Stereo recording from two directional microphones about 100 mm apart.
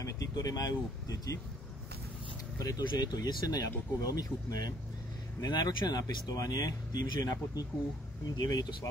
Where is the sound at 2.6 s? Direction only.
35° left (ahead or behind).